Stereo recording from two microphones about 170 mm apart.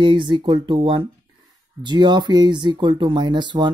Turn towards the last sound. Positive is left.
turn(degrees=-25)  # may be behind; listen again after turning